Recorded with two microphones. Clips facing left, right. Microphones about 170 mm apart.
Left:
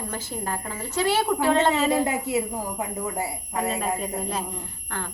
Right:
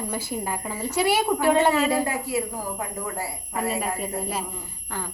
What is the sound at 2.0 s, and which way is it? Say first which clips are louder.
A woman's voice: left 2 dB; 20° left (ahead or behind).